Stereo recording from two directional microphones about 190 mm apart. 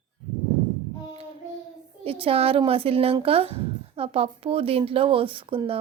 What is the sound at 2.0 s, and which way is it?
Speech, 30° right (ahead or behind).